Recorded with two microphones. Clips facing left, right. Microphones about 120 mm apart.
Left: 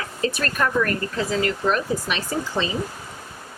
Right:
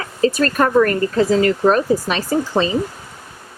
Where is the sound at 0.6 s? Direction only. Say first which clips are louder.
Right 7 dB; 50° right (ahead or behind).